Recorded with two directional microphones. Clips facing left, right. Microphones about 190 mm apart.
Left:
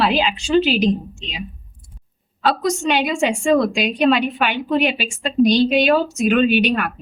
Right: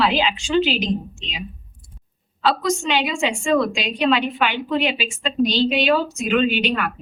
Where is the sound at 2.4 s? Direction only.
50° left (ahead or behind).